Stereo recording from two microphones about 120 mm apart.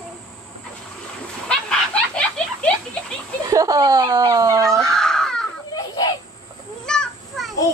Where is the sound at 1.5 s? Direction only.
10° left (ahead or behind).